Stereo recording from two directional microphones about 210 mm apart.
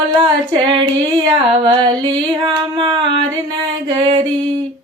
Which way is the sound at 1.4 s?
20° right (ahead or behind).